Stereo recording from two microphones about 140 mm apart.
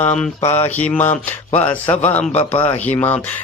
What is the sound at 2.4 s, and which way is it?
Speech, 40° left (ahead or behind).